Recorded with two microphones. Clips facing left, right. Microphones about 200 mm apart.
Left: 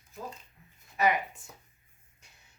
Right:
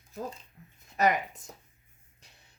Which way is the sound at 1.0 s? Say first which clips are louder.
Right 1 dB; 40° right (ahead or behind).